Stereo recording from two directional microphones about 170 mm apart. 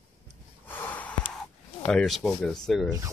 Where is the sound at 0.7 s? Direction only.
10° left (ahead or behind).